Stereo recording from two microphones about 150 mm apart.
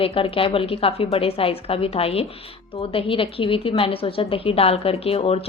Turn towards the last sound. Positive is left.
turn(degrees=40)  # may be behind; listen again after turning